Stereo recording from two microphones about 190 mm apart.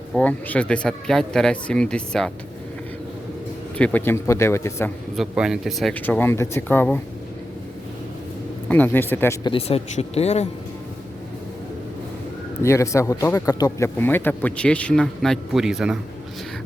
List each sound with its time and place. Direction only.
0.1 s speech: 5° left (ahead or behind)
3.8 s a man's voice: 10° left (ahead or behind)
5.1 s a man's voice: 5° right (ahead or behind)
8.7 s a man's voice: 10° left (ahead or behind)
9.5 s speech: 30° left (ahead or behind)
12.6 s a man's voice: 15° left (ahead or behind); by 16.0 s 5° right (ahead or behind)